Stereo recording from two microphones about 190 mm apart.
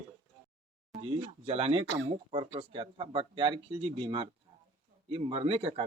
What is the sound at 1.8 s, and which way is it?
Speech, 75° right (ahead or behind).